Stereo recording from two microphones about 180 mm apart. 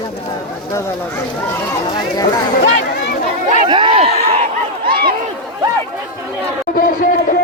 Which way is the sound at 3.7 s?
30° right (ahead or behind).